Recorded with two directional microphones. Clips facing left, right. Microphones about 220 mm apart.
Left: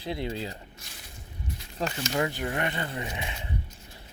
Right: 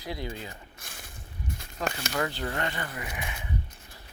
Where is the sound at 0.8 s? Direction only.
50° right (ahead or behind).